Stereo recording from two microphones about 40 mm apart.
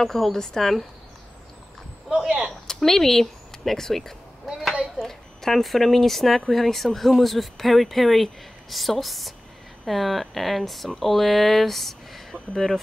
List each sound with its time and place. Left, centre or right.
0.0 s speech: centre
2.0 s whip: right
2.5 s speech: centre